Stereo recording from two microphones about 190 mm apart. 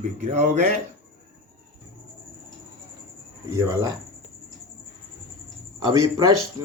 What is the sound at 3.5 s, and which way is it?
Speech, 15° right (ahead or behind).